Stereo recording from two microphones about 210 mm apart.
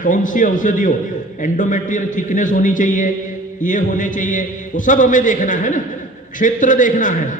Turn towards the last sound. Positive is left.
turn(degrees=40)  # may be behind; listen again after turning